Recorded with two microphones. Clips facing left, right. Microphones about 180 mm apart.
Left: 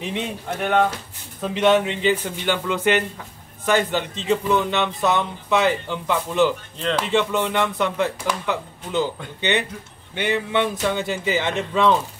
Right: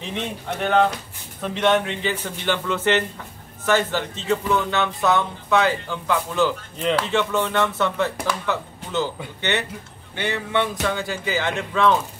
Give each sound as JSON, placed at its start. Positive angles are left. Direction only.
{"t": 0.1, "sound": "speech", "side_deg": 5}
{"t": 1.9, "sound": "speech", "side_deg": 15}